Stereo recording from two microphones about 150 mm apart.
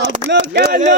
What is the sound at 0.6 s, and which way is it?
Speech, 90° right.